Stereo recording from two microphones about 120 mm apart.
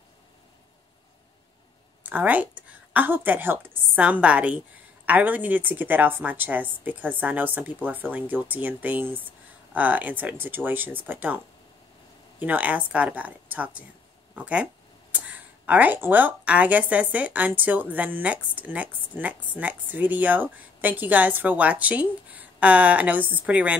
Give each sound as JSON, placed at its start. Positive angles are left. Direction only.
{"t": 2.0, "sound": "speech", "side_deg": -15}